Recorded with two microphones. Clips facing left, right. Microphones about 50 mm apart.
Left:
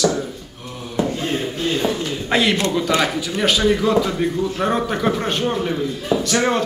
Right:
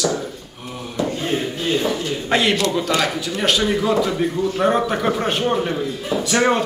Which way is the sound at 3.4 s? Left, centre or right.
Centre.